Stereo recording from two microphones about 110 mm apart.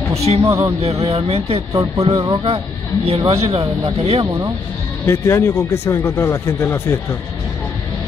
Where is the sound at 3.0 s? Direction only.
65° right (ahead or behind).